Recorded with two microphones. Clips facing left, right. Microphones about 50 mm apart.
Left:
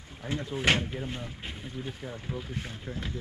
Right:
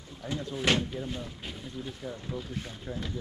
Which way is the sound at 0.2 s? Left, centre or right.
Left.